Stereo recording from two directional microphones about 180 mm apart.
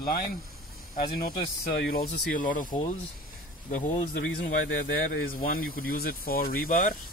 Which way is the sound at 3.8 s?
50° left (ahead or behind).